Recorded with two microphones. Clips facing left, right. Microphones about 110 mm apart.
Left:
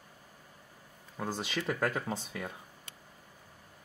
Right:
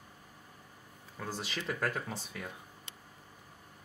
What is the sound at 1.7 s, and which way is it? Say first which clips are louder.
Speech: left 2 dB; 20° left (ahead or behind).